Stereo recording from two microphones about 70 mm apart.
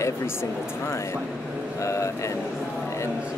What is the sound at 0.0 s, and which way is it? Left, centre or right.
A woman's voice, left.